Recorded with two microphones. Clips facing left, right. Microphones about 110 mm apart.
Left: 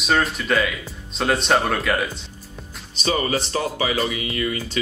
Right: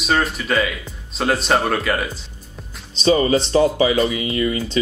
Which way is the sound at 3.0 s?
30° right (ahead or behind).